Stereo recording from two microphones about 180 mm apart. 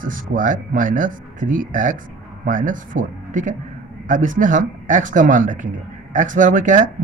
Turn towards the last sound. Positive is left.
turn(degrees=-45)  # may be behind; listen again after turning